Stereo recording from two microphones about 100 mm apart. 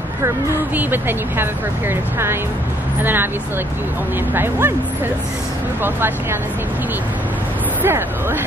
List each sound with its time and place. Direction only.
0.7 s speech: 20° right (ahead or behind)
4.3 s speech: 20° right (ahead or behind)
5.8 s speech: 20° right (ahead or behind)
7.8 s speech: 20° right (ahead or behind)